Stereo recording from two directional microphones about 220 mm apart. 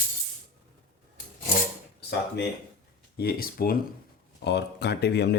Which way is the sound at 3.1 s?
45° left (ahead or behind).